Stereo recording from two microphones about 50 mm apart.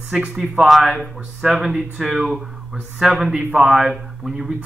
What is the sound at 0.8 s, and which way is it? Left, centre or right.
Speech, right.